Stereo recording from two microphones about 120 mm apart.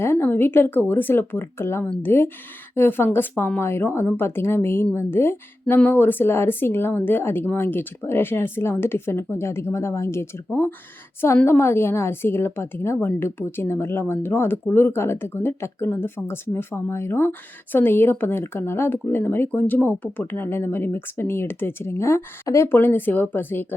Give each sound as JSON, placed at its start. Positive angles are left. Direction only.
{"t": 0.0, "sound": "a woman's voice", "side_deg": 20}